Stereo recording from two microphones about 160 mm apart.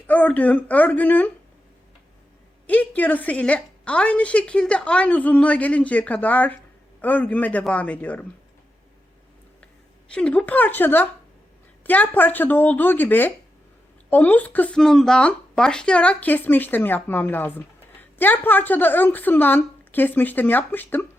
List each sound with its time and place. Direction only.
0.1 s a woman's voice: 10° left (ahead or behind)
2.6 s a woman's voice: 10° left (ahead or behind)
10.1 s a woman's voice: 5° left (ahead or behind)